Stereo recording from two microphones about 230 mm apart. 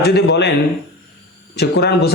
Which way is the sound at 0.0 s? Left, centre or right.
Left.